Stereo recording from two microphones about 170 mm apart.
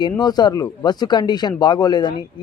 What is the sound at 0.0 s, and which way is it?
Speech, 25° left (ahead or behind).